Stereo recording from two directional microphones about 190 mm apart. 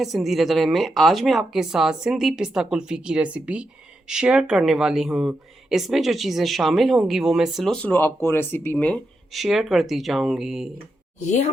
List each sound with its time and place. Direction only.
0.0 s speech: centre (ahead or behind)
11.3 s speech: 40° left (ahead or behind)